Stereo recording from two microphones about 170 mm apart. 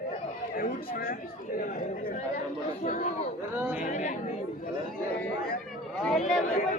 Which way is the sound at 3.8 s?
50° left (ahead or behind).